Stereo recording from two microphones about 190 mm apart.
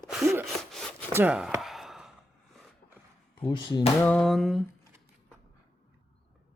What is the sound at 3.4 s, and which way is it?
Speech, 25° left (ahead or behind).